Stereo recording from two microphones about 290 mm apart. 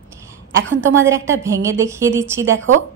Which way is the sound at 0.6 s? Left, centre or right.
Right.